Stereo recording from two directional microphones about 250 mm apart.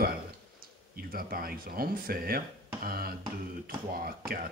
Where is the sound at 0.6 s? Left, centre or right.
Right.